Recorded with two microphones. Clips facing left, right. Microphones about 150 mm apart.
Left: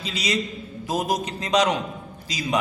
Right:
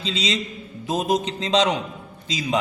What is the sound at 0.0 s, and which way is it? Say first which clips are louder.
A man's voice: right 1 dB; 25° right (ahead or behind).